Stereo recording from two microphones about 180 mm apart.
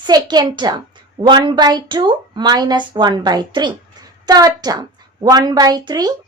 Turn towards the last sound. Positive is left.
turn(degrees=-20)  # may be behind; listen again after turning